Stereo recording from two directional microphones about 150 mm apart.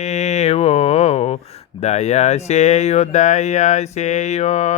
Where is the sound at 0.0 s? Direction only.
50° left (ahead or behind).